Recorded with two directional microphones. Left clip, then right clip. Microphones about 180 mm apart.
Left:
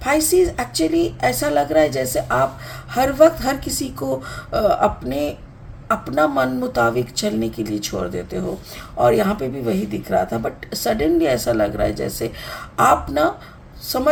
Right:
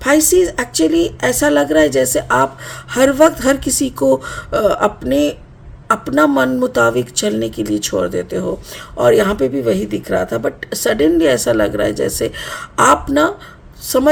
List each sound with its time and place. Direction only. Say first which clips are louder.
0.0 s speech: right 4 dB; 50° right (ahead or behind)